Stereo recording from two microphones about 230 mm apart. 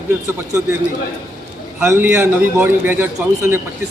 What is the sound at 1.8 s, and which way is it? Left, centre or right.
A man's voice, centre.